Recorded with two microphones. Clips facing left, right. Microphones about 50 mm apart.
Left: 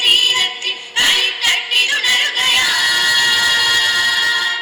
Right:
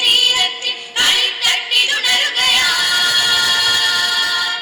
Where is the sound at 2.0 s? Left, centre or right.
Left.